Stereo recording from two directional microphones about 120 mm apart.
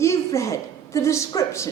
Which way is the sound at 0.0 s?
25° left (ahead or behind).